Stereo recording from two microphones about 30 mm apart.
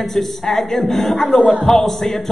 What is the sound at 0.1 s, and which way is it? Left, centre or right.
A man's voice, centre.